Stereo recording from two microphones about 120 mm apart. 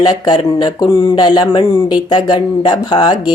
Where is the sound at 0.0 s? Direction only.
35° left (ahead or behind).